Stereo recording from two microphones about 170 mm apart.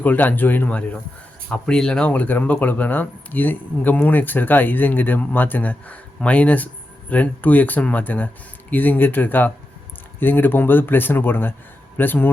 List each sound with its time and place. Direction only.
0.0 s speech: 10° left (ahead or behind)